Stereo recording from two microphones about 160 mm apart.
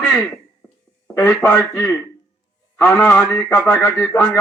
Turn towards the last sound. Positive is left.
turn(degrees=10)  # may be behind; listen again after turning